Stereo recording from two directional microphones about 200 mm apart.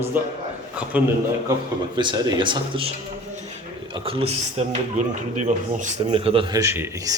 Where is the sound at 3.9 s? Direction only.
25° right (ahead or behind).